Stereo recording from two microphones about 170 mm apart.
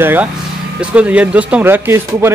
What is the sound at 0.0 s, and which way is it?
Speech, 10° right (ahead or behind).